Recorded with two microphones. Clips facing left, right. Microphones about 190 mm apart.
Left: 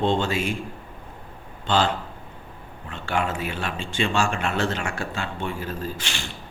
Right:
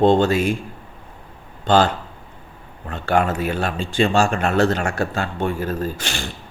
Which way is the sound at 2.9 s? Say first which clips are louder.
Right 7 dB; 45° right (ahead or behind).